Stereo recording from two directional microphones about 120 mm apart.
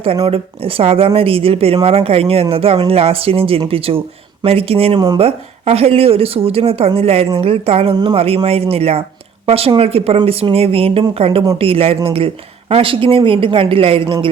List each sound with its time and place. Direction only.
0.3 s a woman's voice: 50° right (ahead or behind)